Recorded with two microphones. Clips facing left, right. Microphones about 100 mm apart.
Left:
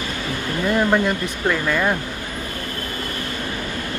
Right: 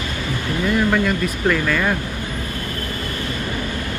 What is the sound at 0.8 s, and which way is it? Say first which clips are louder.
Speech: even; 20° left (ahead or behind).